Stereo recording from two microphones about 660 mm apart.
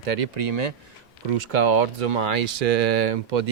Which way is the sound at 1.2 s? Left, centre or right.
Right.